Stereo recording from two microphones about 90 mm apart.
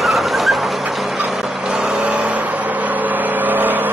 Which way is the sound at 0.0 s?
Centre (ahead or behind).